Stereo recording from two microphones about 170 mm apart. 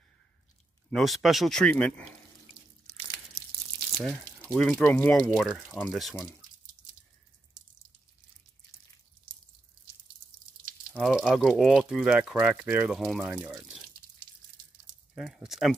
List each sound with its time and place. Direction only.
0.8 s speech: centre (ahead or behind)
2.9 s tearing: 40° right (ahead or behind)
4.5 s speech: 5° left (ahead or behind)
10.9 s speech: centre (ahead or behind)
15.1 s speech: centre (ahead or behind)